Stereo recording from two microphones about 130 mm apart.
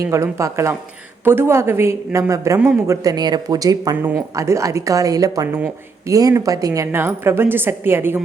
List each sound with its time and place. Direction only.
0.1 s a woman's voice: 25° right (ahead or behind)